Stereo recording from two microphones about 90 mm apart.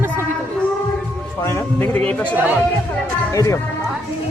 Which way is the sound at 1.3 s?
30° left (ahead or behind).